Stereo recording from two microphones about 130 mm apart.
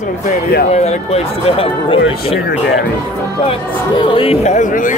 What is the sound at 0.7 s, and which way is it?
A man's voice, 55° left (ahead or behind).